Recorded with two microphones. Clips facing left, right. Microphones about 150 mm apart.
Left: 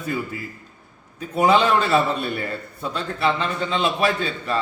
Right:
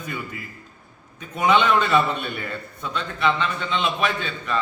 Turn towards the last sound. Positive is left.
turn(degrees=35)  # may be behind; listen again after turning